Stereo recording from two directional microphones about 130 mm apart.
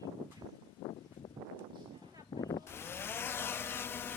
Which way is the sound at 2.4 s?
30° left (ahead or behind).